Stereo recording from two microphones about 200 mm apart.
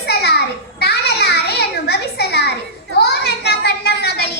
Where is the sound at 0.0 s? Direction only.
55° left (ahead or behind).